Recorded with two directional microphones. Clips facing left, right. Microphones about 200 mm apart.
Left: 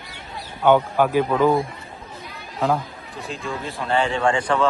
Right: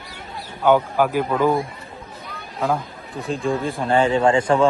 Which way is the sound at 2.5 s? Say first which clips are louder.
Left 1 dB; centre (ahead or behind).